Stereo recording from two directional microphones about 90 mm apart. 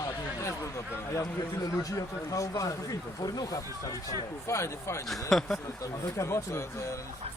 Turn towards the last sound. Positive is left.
turn(degrees=30)  # may be behind; listen again after turning